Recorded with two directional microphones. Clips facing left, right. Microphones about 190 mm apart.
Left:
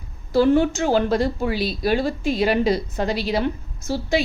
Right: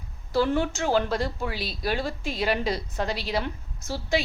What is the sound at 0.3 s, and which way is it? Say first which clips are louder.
A woman's voice: left 7 dB; 20° left (ahead or behind).